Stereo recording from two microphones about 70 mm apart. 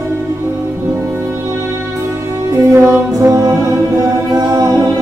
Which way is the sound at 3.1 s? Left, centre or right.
Right.